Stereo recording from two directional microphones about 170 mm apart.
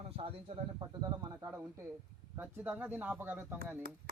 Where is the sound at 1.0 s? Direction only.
25° right (ahead or behind).